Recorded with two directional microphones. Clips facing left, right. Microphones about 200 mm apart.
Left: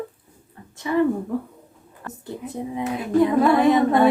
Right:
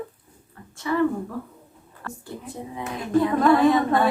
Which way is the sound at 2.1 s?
20° left (ahead or behind).